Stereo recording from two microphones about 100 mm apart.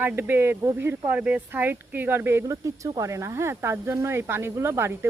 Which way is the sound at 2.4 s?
35° right (ahead or behind).